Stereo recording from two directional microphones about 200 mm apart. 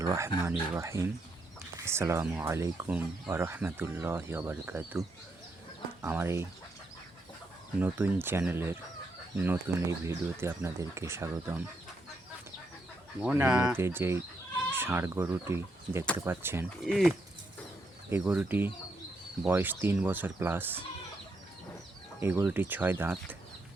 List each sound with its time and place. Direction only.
0.0 s speech: 15° right (ahead or behind)
7.8 s speech: 10° right (ahead or behind)
13.2 s speech: 10° right (ahead or behind)
16.8 s speech: centre (ahead or behind)
22.2 s speech: 10° right (ahead or behind)